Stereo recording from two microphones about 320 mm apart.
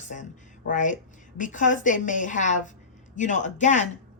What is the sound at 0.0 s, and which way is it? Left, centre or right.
A woman's voice, left.